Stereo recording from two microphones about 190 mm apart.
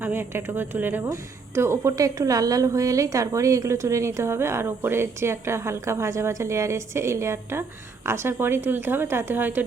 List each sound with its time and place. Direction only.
0.0 s speech: 10° right (ahead or behind)